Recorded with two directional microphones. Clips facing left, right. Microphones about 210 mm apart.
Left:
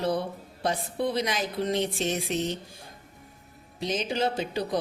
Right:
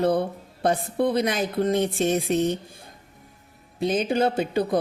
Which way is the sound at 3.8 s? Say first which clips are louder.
Right 6 dB; 55° right (ahead or behind).